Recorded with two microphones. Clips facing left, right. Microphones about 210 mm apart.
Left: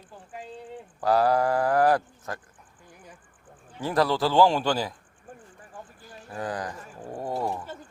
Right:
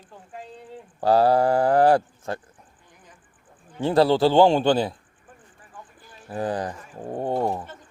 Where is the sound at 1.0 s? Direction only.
30° right (ahead or behind).